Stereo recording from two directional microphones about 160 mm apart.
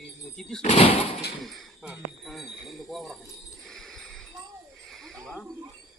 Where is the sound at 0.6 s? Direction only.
45° left (ahead or behind).